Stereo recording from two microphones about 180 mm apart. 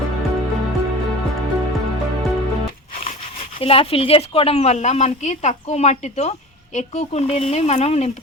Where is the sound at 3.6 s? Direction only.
30° left (ahead or behind).